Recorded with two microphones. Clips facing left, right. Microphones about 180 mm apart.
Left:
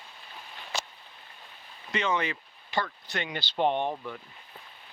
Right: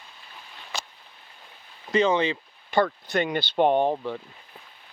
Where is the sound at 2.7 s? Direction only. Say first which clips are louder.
Right 9 dB; 50° right (ahead or behind).